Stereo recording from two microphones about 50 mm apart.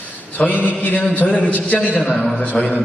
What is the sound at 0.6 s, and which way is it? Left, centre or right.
A man's voice, left.